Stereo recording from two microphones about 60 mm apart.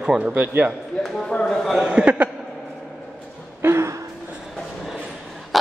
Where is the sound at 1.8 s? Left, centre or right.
Centre.